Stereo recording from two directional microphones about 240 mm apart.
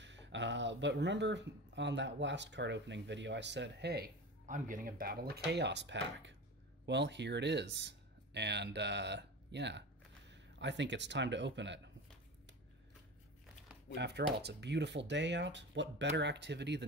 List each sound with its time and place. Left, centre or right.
0.0 s speech: right
13.9 s speech: right